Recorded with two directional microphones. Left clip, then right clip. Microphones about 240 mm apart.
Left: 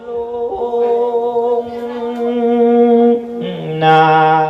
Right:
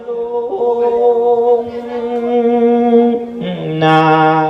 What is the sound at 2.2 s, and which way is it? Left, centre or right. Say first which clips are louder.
Music: even; right.